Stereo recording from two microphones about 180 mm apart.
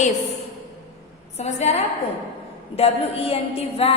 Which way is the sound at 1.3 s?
40° left (ahead or behind).